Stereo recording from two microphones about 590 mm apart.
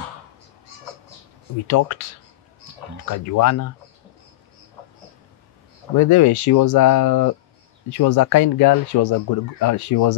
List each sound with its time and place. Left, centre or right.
1.7 s speech: left
3.1 s speech: left
5.9 s speech: left